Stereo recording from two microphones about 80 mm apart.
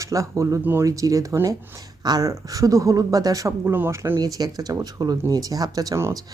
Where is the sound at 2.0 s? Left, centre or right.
Right.